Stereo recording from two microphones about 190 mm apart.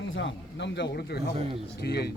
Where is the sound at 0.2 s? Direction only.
65° left (ahead or behind).